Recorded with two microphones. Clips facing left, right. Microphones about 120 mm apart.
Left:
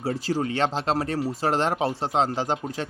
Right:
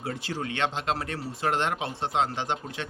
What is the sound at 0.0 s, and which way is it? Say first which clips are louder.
Speech: left 7 dB; 35° left (ahead or behind).